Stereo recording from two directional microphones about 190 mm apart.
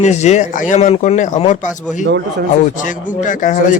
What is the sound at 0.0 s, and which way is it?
A man's voice, 35° left (ahead or behind).